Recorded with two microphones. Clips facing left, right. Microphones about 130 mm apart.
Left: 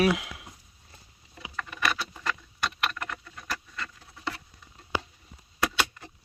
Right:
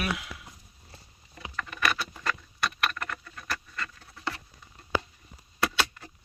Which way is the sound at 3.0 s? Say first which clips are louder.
Even; 10° left (ahead or behind).